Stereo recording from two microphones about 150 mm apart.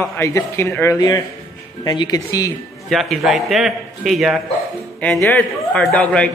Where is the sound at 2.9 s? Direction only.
Centre (ahead or behind).